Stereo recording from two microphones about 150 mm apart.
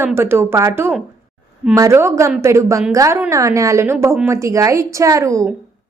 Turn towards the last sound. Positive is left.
turn(degrees=-20)  # may be behind; listen again after turning